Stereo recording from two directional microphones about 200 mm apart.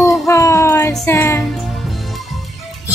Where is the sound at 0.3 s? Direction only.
15° left (ahead or behind).